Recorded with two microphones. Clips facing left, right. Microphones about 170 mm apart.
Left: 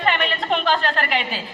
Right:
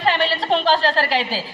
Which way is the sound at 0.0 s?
35° right (ahead or behind).